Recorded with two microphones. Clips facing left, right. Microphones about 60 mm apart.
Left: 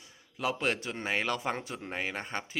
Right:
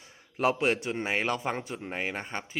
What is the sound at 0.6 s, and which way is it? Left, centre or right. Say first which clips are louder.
Speech: right 4 dB; centre.